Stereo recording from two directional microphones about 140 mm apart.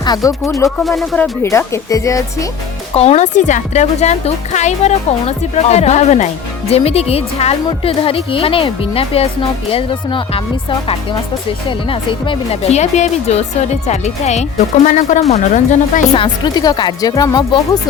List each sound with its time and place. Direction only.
0.0 s speech: 25° left (ahead or behind)
0.9 s speech: centre (ahead or behind)
1.2 s speech: 20° left (ahead or behind)
2.9 s a woman's voice: 50° left (ahead or behind)
16.1 s speech: 35° left (ahead or behind)